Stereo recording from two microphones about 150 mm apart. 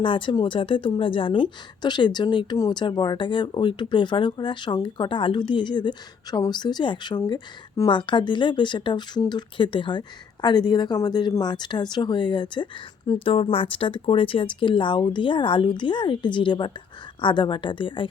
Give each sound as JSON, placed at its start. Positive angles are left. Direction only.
{"t": 0.0, "sound": "speech", "side_deg": 35}